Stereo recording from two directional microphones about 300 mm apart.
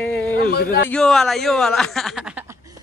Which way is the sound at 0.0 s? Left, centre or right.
Centre.